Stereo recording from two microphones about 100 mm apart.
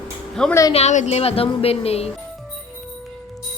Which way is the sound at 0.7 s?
90° left.